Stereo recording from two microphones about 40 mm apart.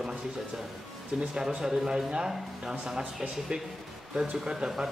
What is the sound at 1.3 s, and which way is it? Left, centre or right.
A man's voice, centre.